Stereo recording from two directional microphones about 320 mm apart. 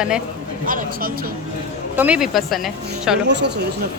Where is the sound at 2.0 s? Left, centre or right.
Centre.